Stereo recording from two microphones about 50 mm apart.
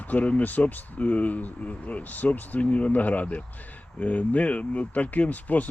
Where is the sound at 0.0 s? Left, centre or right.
Left.